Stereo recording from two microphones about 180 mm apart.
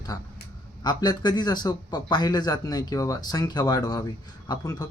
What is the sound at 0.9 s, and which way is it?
Speech, 25° left (ahead or behind).